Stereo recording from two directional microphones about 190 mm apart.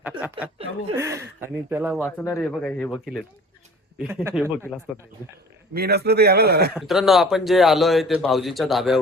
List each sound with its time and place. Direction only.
0.2 s speech: 10° right (ahead or behind)
2.0 s a man's voice: 10° left (ahead or behind); by 4.4 s 10° right (ahead or behind)
5.7 s speech: 55° right (ahead or behind)
6.7 s a man's voice: centre (ahead or behind)